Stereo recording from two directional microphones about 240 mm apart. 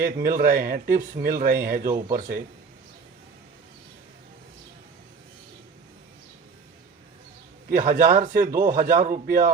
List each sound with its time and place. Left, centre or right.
0.0 s speech: right
7.7 s speech: right